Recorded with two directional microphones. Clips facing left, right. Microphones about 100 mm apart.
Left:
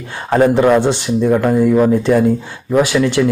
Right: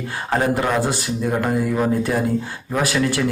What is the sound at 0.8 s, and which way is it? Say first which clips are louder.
Speech: left 7 dB; 25° left (ahead or behind).